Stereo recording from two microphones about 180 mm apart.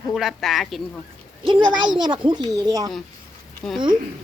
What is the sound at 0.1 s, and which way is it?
Speech, centre (ahead or behind).